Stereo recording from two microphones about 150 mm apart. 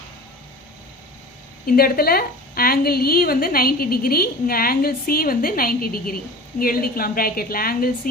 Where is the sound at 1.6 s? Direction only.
80° left.